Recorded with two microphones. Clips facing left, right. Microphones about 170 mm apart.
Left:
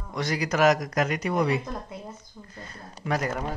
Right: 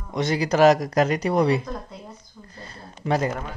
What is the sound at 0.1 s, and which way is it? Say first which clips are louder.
Speech: right 5 dB; 25° right (ahead or behind).